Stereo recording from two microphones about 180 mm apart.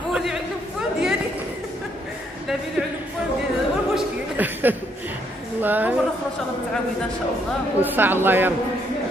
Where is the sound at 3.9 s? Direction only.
10° right (ahead or behind).